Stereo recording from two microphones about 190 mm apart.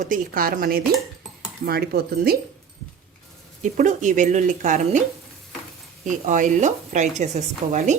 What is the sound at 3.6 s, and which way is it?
Speech, 40° right (ahead or behind).